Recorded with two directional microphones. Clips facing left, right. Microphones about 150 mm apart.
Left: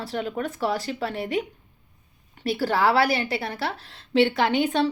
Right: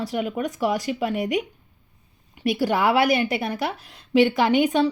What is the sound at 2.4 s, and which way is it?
A woman's voice, 15° right (ahead or behind).